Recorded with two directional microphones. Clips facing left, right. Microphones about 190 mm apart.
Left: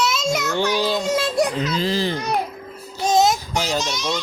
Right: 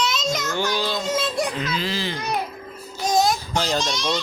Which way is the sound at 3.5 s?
10° left (ahead or behind).